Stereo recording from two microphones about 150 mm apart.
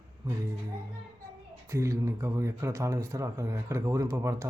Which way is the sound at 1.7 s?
20° right (ahead or behind).